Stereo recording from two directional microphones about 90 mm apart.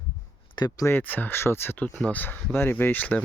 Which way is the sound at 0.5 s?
45° left (ahead or behind).